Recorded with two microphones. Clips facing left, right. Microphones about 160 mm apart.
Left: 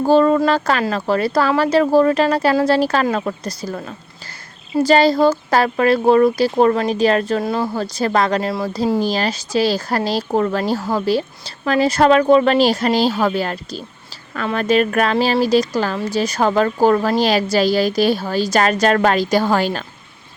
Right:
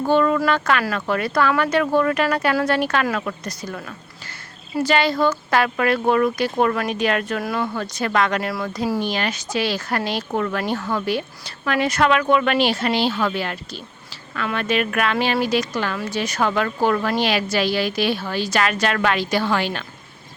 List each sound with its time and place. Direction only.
0.0 s speech: 35° left (ahead or behind)